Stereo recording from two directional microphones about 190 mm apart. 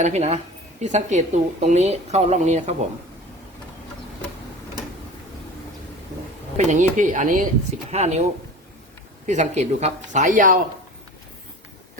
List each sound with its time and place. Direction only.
0.0 s a woman's voice: 35° right (ahead or behind)
6.6 s a woman's voice: 40° right (ahead or behind)